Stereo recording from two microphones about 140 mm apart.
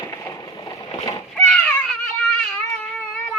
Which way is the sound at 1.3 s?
5° left (ahead or behind).